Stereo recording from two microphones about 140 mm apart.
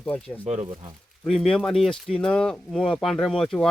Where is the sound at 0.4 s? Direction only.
45° right (ahead or behind).